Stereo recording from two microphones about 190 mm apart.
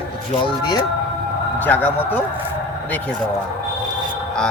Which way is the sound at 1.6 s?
10° left (ahead or behind).